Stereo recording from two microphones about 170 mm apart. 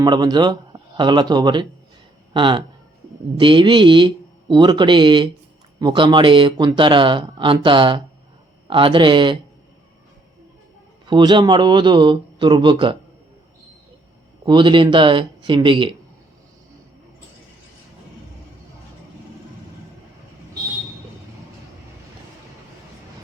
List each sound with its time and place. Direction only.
0.0 s speech: 25° right (ahead or behind)
11.0 s speech: 25° right (ahead or behind)
14.4 s speech: 30° right (ahead or behind)